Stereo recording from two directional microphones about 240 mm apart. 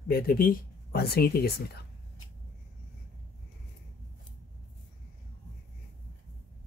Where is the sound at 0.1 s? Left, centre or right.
Left.